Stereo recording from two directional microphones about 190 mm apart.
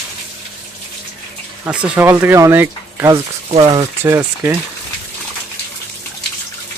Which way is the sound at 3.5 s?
30° right (ahead or behind).